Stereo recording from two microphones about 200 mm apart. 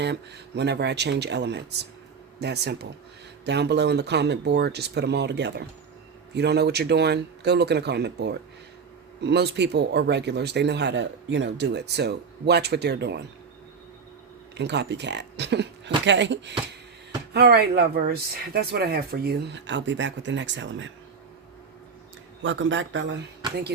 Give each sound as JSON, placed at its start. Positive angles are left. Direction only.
{"t": 0.0, "sound": "a man's voice", "side_deg": -60}
{"t": 14.5, "sound": "a man's voice", "side_deg": -60}
{"t": 22.4, "sound": "a man's voice", "side_deg": -70}